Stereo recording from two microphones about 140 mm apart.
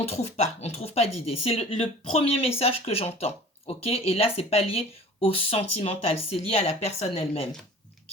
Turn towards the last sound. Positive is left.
turn(degrees=50)  # may be behind; listen again after turning